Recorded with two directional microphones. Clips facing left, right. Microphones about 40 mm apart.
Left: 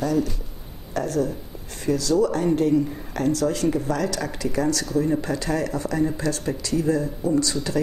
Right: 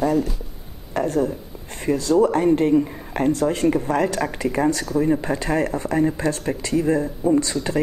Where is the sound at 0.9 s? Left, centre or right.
Right.